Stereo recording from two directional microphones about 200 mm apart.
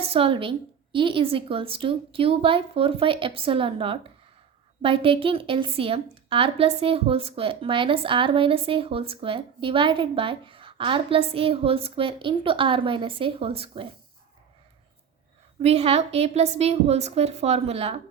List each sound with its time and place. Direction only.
0.1 s a woman's voice: 25° right (ahead or behind)
15.6 s a woman's voice: 30° right (ahead or behind)